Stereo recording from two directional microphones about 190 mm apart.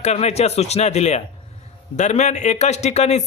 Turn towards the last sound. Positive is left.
turn(degrees=35)  # may be behind; listen again after turning